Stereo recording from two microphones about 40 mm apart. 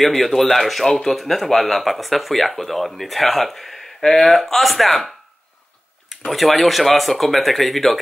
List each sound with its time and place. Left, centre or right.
0.0 s speech: centre